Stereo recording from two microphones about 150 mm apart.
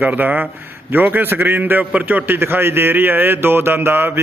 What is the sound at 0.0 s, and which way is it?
A man's voice, 10° right (ahead or behind).